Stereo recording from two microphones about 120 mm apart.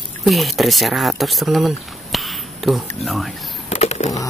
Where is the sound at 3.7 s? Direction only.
70° left (ahead or behind).